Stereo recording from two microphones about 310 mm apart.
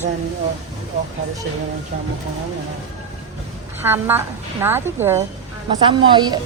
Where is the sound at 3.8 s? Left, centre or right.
Centre.